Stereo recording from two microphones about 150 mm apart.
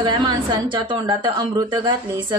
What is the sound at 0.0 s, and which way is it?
A woman's voice, 30° right (ahead or behind).